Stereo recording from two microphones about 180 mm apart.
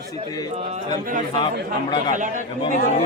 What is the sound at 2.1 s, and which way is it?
Speech, 45° right (ahead or behind).